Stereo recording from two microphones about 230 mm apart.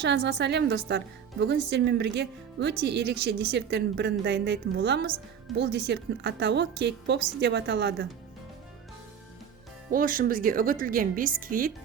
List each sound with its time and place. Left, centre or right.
0.0 s a woman's voice: right
9.9 s a woman's voice: right